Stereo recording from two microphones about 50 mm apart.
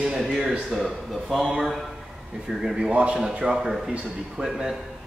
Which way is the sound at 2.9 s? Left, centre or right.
Right.